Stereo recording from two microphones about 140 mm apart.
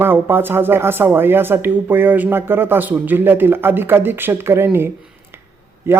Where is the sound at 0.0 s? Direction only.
15° right (ahead or behind).